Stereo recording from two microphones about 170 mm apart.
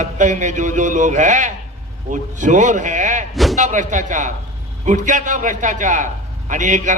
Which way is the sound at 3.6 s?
45° right (ahead or behind).